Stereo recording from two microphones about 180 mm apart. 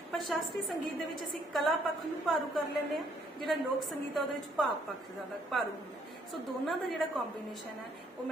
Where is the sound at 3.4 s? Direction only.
Centre (ahead or behind).